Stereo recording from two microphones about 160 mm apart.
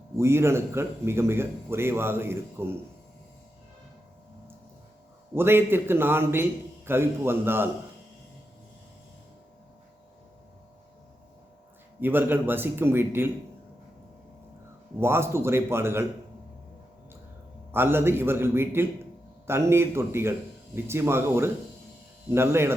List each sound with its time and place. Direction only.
0.2 s a man's voice: 15° right (ahead or behind)
5.3 s a man's voice: 15° right (ahead or behind)
11.9 s a man's voice: 10° right (ahead or behind)
14.9 s a man's voice: 15° right (ahead or behind)
17.7 s a man's voice: 15° right (ahead or behind)